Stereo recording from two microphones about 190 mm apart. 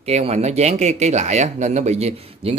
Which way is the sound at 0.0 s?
35° right (ahead or behind).